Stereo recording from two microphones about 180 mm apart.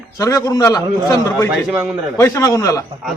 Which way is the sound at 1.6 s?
5° right (ahead or behind).